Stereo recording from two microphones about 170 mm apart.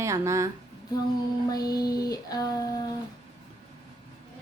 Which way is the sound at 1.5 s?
20° left (ahead or behind).